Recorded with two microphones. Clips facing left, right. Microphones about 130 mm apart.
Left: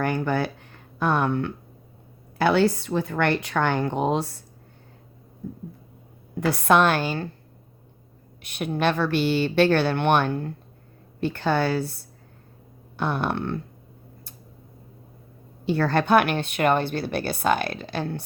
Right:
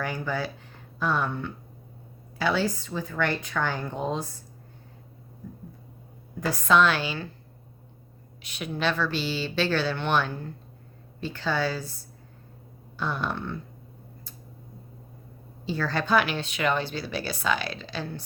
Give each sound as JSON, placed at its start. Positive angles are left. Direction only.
{"t": 0.0, "sound": "a woman's voice", "side_deg": 60}
{"t": 6.4, "sound": "a woman's voice", "side_deg": 65}
{"t": 8.4, "sound": "a woman's voice", "side_deg": 55}
{"t": 15.6, "sound": "a woman's voice", "side_deg": 60}